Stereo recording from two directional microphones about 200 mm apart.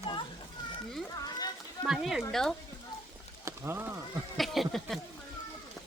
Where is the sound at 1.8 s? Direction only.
Centre (ahead or behind).